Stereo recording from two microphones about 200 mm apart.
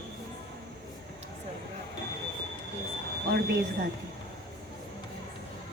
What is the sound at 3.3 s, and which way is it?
Speech, 50° right (ahead or behind).